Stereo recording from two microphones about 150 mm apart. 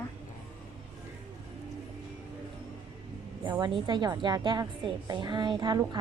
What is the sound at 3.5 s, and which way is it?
A woman's voice, 30° right (ahead or behind).